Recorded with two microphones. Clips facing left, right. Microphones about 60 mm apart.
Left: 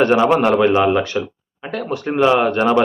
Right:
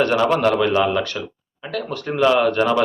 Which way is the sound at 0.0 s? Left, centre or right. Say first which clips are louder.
Left 3 dB; centre.